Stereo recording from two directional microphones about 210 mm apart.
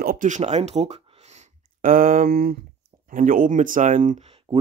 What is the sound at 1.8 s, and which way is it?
Speech, 40° right (ahead or behind).